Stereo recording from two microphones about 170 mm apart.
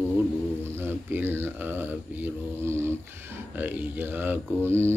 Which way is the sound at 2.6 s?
15° right (ahead or behind).